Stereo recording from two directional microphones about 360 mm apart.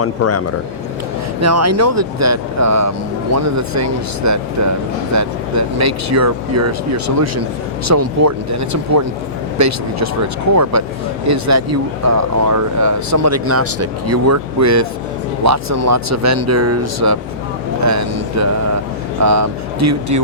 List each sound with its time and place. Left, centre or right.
0.0 s speech: left
1.4 s speech: right